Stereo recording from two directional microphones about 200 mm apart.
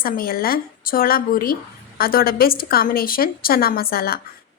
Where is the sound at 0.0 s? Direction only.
50° left (ahead or behind).